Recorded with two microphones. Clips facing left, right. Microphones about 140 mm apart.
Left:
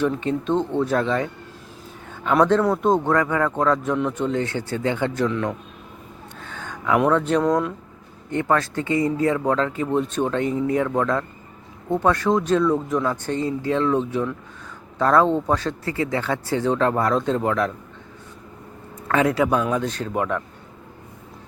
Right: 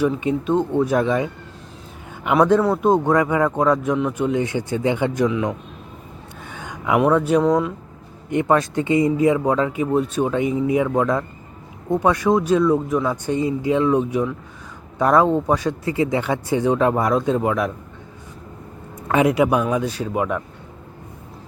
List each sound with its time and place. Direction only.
0.0 s a man's voice: 10° right (ahead or behind)
6.4 s a sound: 15° right (ahead or behind)
7.0 s a man's voice: 10° right (ahead or behind)
19.0 s a man's voice: 15° right (ahead or behind)